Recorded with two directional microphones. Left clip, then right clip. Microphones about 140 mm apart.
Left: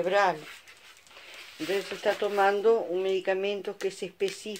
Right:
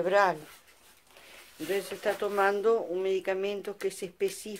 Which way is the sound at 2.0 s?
25° left (ahead or behind).